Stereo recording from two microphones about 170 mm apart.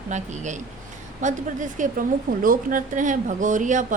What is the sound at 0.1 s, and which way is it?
A woman's voice, 45° right (ahead or behind).